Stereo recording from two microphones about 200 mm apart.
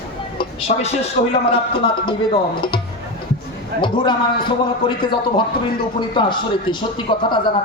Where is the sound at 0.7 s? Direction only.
40° left (ahead or behind).